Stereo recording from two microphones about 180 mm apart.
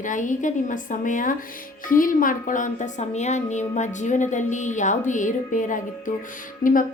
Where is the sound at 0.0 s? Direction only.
45° left (ahead or behind).